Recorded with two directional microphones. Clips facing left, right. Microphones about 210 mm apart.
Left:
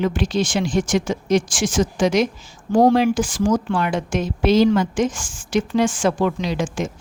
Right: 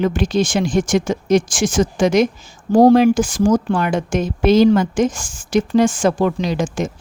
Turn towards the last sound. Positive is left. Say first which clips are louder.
# right 3 dB
turn(degrees=-40)  # may be behind; listen again after turning